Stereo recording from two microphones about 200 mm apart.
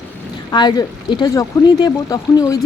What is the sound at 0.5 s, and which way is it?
Speech, 20° left (ahead or behind).